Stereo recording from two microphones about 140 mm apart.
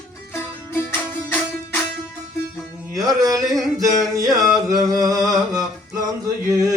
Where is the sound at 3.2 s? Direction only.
25° right (ahead or behind).